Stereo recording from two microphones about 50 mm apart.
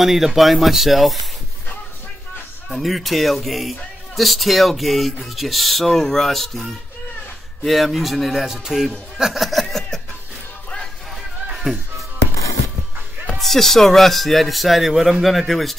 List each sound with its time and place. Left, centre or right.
0.0 s speech: centre
2.7 s speech: centre
7.6 s speech: centre
9.2 s chuckle: centre
11.7 s speech: centre
13.4 s speech: centre